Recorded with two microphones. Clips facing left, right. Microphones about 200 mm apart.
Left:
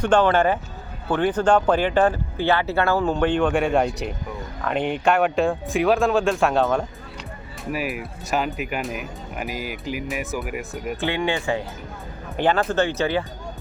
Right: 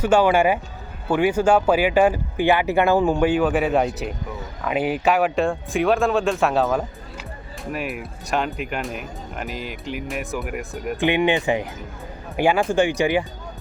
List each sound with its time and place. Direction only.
0.0 s speech: 10° right (ahead or behind)
11.0 s speech: 15° right (ahead or behind)